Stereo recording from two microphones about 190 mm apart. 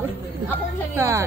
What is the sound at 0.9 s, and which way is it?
Speech, 15° right (ahead or behind).